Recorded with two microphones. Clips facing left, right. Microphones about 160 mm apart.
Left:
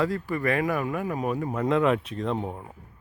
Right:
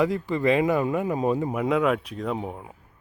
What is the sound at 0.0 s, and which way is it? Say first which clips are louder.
Speech: right 3 dB; 20° right (ahead or behind).